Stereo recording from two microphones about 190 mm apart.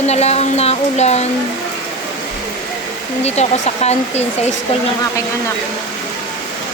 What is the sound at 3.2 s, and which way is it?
Speech, 35° left (ahead or behind).